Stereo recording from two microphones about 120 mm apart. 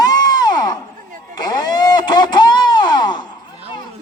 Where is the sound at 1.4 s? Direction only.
35° left (ahead or behind).